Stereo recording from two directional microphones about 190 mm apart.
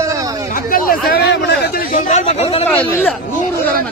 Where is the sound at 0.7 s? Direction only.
50° left (ahead or behind).